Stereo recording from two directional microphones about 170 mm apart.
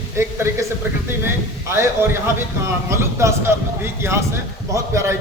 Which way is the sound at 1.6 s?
15° right (ahead or behind).